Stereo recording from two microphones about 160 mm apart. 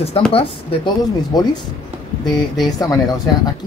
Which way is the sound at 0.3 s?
35° left (ahead or behind).